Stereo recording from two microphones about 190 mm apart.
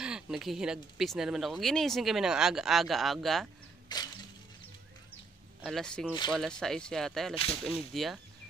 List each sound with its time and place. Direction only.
0.0 s speech: 5° right (ahead or behind)
3.9 s a sound: 20° left (ahead or behind)
5.6 s speech: centre (ahead or behind)